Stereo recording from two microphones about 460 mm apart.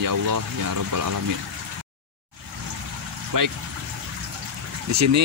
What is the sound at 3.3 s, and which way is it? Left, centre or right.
Speech, right.